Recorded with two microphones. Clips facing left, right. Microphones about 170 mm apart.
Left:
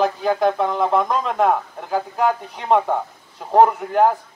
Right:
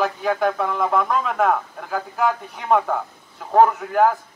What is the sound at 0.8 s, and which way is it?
A man's voice, 20° left (ahead or behind).